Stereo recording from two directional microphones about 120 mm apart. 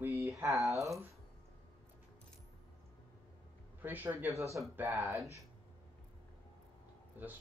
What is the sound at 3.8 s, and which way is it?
Speech, 15° right (ahead or behind).